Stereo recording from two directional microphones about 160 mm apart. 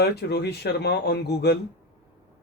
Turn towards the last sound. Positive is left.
turn(degrees=90)